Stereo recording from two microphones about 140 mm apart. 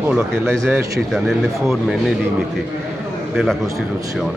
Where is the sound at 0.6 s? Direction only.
15° right (ahead or behind).